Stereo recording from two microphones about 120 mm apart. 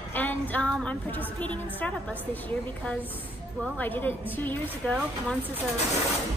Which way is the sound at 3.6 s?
15° left (ahead or behind).